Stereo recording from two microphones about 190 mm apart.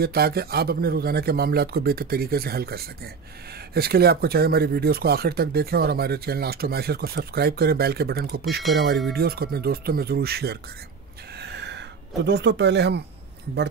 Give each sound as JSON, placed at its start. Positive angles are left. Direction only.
{"t": 0.0, "sound": "speech", "side_deg": -55}
{"t": 11.3, "sound": "a sound", "side_deg": -60}
{"t": 12.3, "sound": "speech", "side_deg": -65}